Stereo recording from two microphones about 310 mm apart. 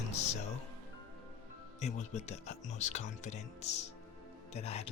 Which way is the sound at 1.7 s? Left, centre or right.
Left.